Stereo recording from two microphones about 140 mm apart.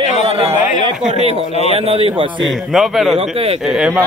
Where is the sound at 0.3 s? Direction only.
45° right (ahead or behind).